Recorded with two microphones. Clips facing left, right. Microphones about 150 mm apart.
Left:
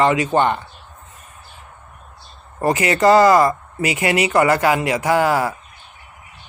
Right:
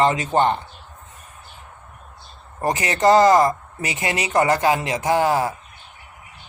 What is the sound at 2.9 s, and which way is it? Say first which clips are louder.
Speech: left 2 dB; 90° left.